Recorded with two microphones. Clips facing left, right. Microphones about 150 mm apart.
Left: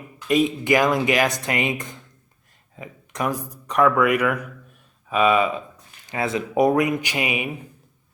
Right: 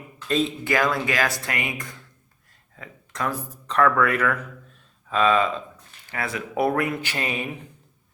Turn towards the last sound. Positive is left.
turn(degrees=10)  # may be behind; listen again after turning